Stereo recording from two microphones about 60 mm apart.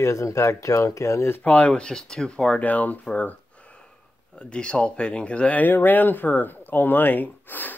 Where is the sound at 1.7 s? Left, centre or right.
Centre.